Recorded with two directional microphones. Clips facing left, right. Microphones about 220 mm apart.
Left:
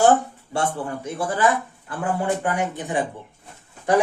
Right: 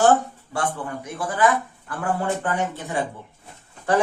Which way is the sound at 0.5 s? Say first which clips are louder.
Left 2 dB; 25° left (ahead or behind).